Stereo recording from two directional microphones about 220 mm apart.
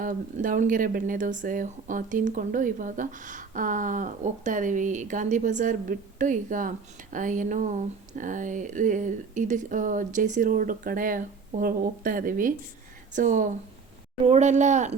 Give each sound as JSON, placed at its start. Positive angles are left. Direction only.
{"t": 0.0, "sound": "speech", "side_deg": -35}